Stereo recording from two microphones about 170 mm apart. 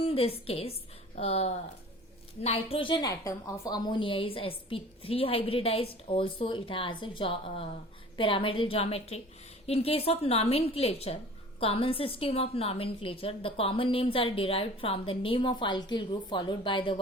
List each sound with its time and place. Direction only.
0.0 s a woman's voice: 35° left (ahead or behind)